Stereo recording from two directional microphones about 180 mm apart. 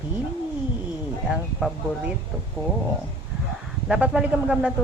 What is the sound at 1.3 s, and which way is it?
Speech, centre (ahead or behind).